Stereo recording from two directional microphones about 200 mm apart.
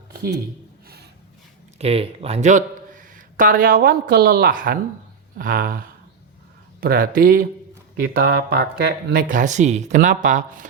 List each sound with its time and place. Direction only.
1.8 s a man's voice: 30° right (ahead or behind)